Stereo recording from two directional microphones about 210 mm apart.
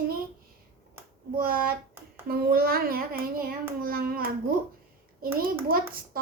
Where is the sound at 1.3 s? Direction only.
45° right (ahead or behind).